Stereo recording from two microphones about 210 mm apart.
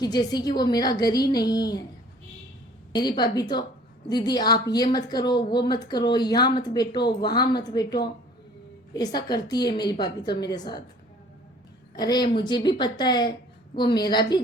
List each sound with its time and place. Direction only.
0.0 s a woman's voice: 20° left (ahead or behind)
2.9 s a woman's voice: 20° left (ahead or behind)
11.9 s a woman's voice: 20° left (ahead or behind)